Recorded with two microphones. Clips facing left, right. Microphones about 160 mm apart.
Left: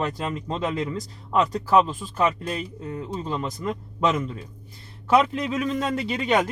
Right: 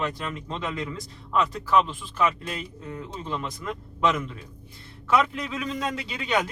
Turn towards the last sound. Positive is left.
turn(degrees=50)  # may be behind; listen again after turning